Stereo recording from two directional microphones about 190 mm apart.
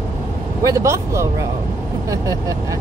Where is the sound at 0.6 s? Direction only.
15° right (ahead or behind).